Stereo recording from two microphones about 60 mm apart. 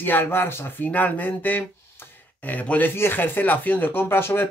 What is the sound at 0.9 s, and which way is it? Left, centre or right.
Speech, left.